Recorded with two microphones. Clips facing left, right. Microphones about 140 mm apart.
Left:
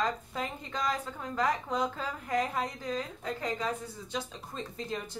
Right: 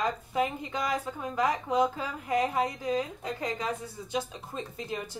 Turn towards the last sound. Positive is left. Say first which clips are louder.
# right 1 dB
turn(degrees=-10)  # may be behind; listen again after turning